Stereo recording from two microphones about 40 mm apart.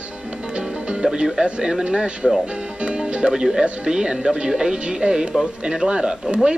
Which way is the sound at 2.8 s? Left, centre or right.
Right.